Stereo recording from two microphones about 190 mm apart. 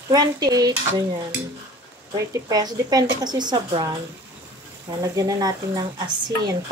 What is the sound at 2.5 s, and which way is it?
Speech, 20° right (ahead or behind).